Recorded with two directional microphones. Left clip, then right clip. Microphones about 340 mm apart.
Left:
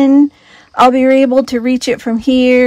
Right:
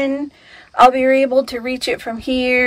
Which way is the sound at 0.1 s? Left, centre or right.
Centre.